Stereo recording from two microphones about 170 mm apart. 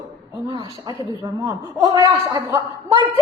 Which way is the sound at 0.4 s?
25° right (ahead or behind).